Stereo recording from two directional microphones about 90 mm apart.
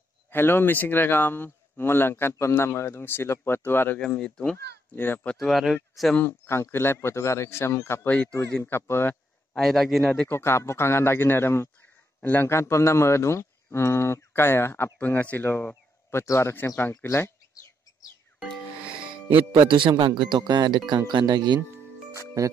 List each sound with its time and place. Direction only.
0.3 s a man's voice: 25° left (ahead or behind)
4.0 s speech: 10° left (ahead or behind)
4.9 s a man's voice: 25° left (ahead or behind)
5.4 s a man's voice: centre (ahead or behind)
6.1 s a man's voice: 25° left (ahead or behind)
8.1 s a man's voice: 15° left (ahead or behind)
9.6 s a man's voice: centre (ahead or behind)
10.3 s a man's voice: 30° left (ahead or behind)
18.9 s speech: 70° right (ahead or behind); by 21.5 s 55° right (ahead or behind)
22.4 s speech: 40° right (ahead or behind)